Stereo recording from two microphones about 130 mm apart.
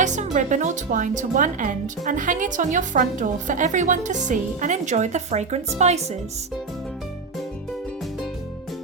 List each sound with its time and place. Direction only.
0.0 s a woman's voice: 70° right (ahead or behind)